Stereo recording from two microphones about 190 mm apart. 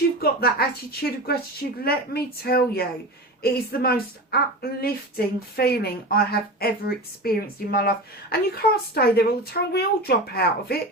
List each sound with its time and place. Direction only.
0.2 s a woman's voice: 55° left (ahead or behind)